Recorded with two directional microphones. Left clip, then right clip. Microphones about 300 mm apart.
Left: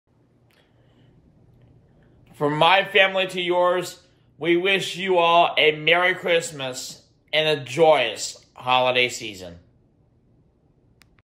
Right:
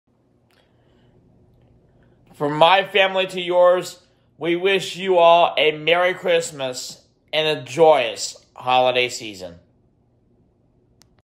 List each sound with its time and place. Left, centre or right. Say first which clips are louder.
2.3 s speech: right 3 dB; centre